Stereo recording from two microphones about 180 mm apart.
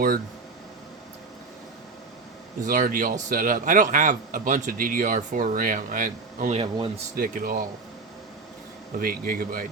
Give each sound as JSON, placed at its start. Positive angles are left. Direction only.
{"t": 2.6, "sound": "a man's voice", "side_deg": -50}
{"t": 6.6, "sound": "speech", "side_deg": -30}
{"t": 7.2, "sound": "a man's voice", "side_deg": -50}
{"t": 9.0, "sound": "a man's voice", "side_deg": -55}